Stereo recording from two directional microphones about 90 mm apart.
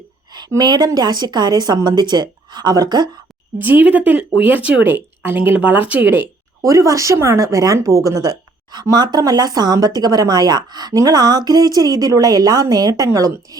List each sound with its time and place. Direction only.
0.3 s speech: 50° right (ahead or behind)
3.6 s speech: 20° right (ahead or behind)
6.6 s speech: 35° right (ahead or behind)